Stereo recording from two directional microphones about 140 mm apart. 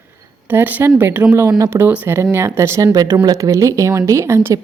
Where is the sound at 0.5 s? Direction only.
15° right (ahead or behind).